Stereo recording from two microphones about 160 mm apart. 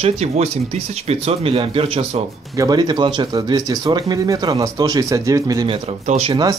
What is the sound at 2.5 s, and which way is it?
Speech, 25° right (ahead or behind).